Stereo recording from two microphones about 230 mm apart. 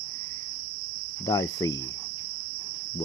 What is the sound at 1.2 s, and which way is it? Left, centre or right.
Cricket, centre.